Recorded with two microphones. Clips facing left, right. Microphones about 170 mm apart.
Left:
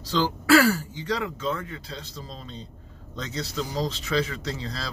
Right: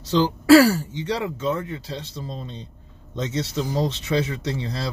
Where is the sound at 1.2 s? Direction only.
20° right (ahead or behind).